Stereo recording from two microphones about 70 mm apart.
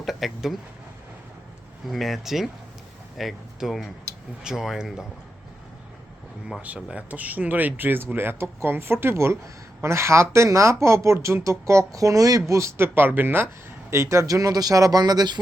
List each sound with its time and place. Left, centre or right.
0.0 s speech: centre
1.9 s speech: centre
6.7 s speech: centre
7.1 s speech: right
12.5 s speech: right